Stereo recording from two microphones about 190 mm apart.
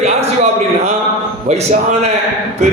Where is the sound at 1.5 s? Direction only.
35° right (ahead or behind).